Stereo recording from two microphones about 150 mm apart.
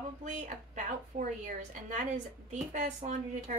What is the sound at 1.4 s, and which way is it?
A woman's voice, 55° right (ahead or behind).